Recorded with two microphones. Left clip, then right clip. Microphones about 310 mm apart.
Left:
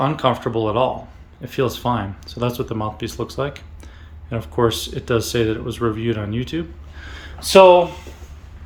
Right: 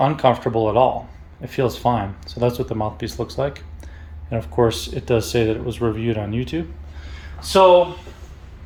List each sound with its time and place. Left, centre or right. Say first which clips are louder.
0.0 s speech: right 2 dB; centre
7.0 s a sound: left 6 dB; centre
7.3 s speech: left 4 dB; left